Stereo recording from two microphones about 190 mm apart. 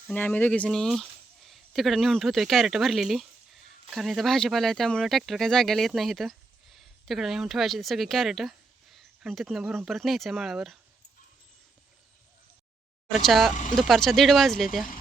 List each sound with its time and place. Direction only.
0.1 s speech: 10° left (ahead or behind)
13.1 s speech: centre (ahead or behind)
13.5 s speech: 40° left (ahead or behind)
13.7 s speech: centre (ahead or behind)